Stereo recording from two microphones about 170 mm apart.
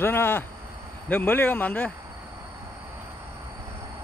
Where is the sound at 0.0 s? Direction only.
15° left (ahead or behind).